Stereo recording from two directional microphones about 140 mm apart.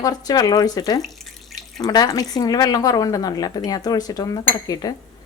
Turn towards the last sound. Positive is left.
turn(degrees=30)  # may be behind; listen again after turning